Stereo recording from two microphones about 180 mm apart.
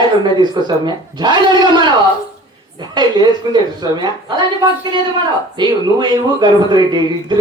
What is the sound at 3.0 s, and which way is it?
Speech, 25° right (ahead or behind).